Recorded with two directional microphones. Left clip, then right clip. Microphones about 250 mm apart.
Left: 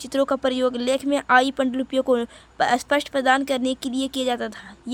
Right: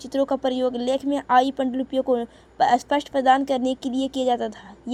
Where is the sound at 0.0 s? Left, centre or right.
Left.